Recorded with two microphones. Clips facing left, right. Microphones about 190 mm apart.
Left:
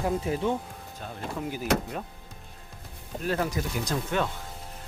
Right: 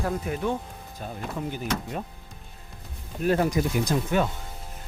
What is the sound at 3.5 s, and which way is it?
Speech, 10° right (ahead or behind).